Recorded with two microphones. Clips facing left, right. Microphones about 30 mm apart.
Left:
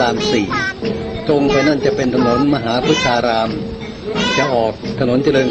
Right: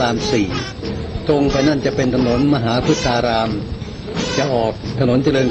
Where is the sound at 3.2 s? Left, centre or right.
Left.